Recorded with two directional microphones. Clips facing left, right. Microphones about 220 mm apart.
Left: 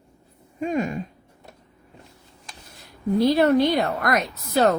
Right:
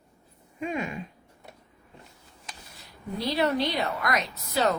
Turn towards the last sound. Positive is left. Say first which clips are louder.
# left 6 dB
turn(degrees=50)  # may be behind; listen again after turning